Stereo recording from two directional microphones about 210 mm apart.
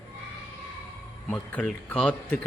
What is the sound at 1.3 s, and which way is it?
A man's voice, 5° left (ahead or behind).